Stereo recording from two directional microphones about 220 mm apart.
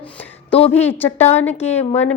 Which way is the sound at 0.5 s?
25° left (ahead or behind).